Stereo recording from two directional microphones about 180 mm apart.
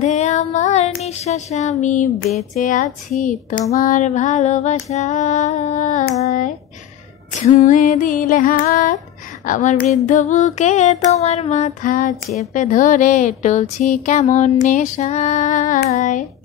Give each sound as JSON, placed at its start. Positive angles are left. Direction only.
{"t": 0.0, "sound": "music", "side_deg": 40}
{"t": 1.0, "sound": "female singing", "side_deg": 35}
{"t": 2.3, "sound": "speech", "side_deg": 45}
{"t": 3.7, "sound": "female singing", "side_deg": 45}
{"t": 7.3, "sound": "speech", "side_deg": 40}
{"t": 9.5, "sound": "female singing", "side_deg": 45}
{"t": 12.5, "sound": "speech", "side_deg": 45}
{"t": 15.9, "sound": "child singing", "side_deg": 40}